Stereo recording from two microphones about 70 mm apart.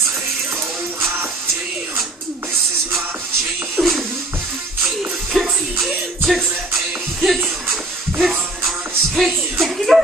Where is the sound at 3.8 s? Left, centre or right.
Right.